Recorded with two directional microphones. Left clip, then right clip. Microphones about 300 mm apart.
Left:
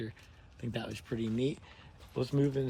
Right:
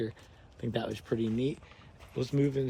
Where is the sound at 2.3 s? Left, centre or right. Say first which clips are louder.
Right 2 dB; left.